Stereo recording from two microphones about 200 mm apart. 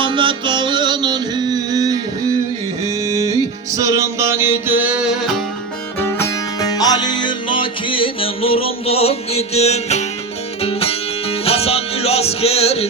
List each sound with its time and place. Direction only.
0.0 s music: 25° right (ahead or behind); by 5.4 s centre (ahead or behind)
6.6 s music: 20° left (ahead or behind)